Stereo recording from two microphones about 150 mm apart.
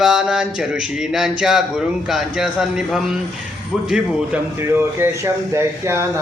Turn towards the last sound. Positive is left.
turn(degrees=-15)  # may be behind; listen again after turning